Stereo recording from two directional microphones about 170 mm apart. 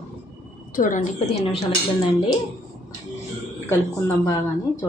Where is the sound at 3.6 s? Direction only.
10° left (ahead or behind).